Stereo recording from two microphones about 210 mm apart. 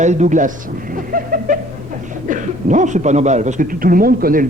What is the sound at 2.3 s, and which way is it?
A man's voice, 35° right (ahead or behind).